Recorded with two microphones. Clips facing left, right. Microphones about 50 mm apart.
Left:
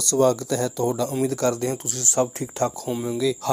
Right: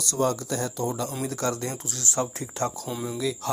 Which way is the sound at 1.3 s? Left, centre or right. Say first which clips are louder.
Left 6 dB; left.